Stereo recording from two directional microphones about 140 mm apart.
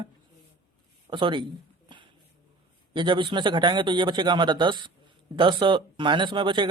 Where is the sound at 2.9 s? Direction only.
35° right (ahead or behind).